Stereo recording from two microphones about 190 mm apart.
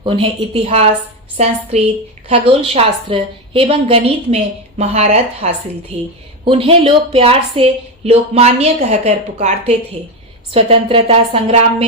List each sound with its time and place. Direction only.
0.0 s a woman's voice: 25° right (ahead or behind)